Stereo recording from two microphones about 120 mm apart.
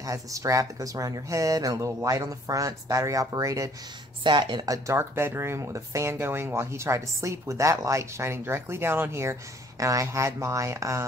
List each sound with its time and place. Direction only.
0.0 s speech: 30° right (ahead or behind)
4.2 s speech: 40° right (ahead or behind); by 11.1 s 25° right (ahead or behind)